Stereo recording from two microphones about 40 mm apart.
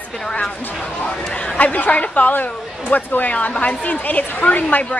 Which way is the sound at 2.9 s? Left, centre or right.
Left.